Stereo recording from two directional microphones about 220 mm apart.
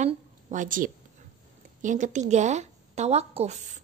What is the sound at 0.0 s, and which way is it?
A woman's voice, 35° right (ahead or behind).